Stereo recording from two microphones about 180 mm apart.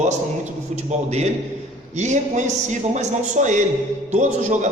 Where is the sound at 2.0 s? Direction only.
40° right (ahead or behind).